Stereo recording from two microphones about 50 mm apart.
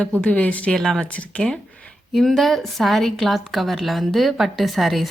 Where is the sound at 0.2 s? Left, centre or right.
Left.